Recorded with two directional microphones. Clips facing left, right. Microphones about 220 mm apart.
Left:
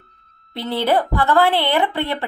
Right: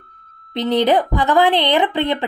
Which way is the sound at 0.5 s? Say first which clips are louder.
Right 4 dB; 20° right (ahead or behind).